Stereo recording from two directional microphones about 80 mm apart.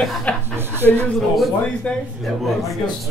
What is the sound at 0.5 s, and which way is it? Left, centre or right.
Speech, right.